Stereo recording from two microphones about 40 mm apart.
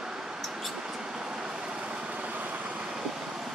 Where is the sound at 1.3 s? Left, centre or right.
Right.